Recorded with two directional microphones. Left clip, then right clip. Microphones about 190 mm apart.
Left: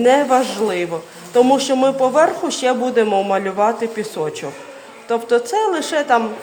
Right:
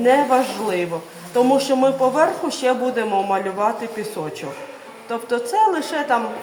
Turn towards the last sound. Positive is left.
turn(degrees=40)  # may be behind; listen again after turning